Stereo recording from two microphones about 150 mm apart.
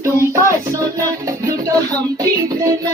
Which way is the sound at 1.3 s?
25° right (ahead or behind).